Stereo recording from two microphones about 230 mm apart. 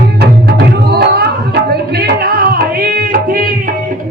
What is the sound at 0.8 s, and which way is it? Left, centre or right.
Music, right.